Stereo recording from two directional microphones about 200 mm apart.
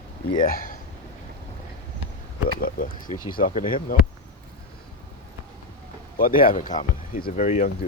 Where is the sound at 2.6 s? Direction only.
45° left (ahead or behind).